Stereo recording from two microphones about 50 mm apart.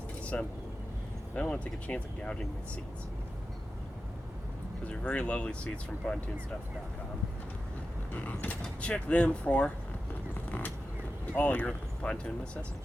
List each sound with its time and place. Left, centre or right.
0.3 s speech: left
4.9 s speech: left
8.1 s mechanisms: left
8.8 s speech: left
11.3 s speech: left